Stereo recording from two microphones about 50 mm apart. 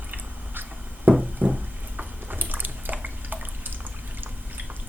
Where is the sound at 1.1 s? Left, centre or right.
Right.